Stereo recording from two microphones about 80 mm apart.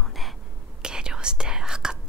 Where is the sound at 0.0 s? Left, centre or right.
Centre.